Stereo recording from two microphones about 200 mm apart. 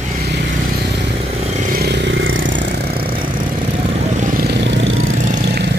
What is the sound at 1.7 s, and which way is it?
Vehicle, 55° right (ahead or behind).